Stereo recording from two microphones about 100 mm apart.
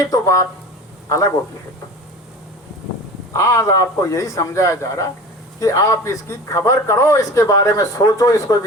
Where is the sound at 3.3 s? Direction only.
30° left (ahead or behind).